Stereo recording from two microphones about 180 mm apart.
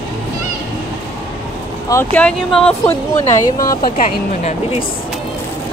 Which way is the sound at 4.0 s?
35° left (ahead or behind).